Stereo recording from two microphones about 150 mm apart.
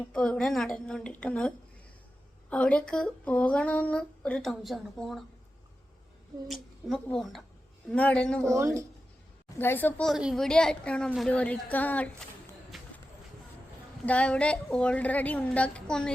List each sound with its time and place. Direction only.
0.1 s a woman's voice: 5° left (ahead or behind)
6.5 s a woman's voice: centre (ahead or behind)
8.5 s speech: 20° right (ahead or behind)
9.6 s speech: 15° left (ahead or behind)
10.1 s a woman's voice: centre (ahead or behind)
12.7 s a sound: centre (ahead or behind)
14.0 s speech: 10° left (ahead or behind)